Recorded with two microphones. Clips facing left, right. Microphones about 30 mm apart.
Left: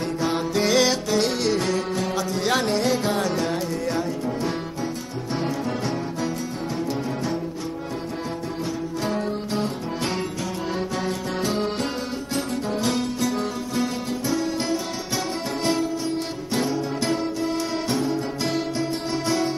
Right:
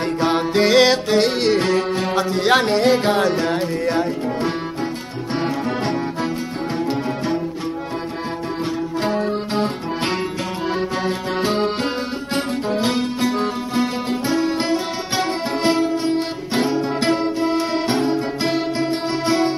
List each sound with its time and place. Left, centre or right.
0.2 s music: right
9.0 s music: right